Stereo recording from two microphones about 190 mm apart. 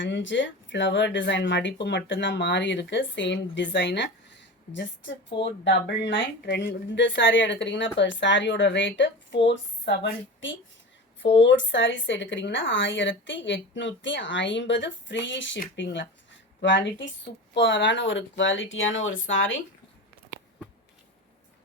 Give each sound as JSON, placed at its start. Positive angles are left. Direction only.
{"t": 0.0, "sound": "a woman's voice", "side_deg": 75}